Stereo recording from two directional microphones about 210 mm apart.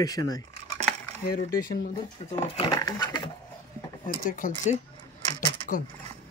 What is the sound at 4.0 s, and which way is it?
Speech, 40° left (ahead or behind).